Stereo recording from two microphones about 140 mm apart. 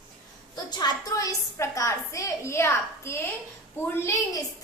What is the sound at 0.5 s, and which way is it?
A woman's voice, 30° left (ahead or behind).